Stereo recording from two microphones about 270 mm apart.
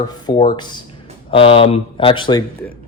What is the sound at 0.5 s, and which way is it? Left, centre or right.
A man's voice, centre.